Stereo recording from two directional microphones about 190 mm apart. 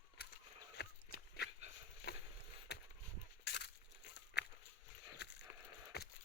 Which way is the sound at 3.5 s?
60° left (ahead or behind).